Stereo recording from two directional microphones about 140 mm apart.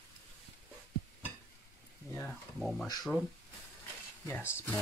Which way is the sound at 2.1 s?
5° left (ahead or behind).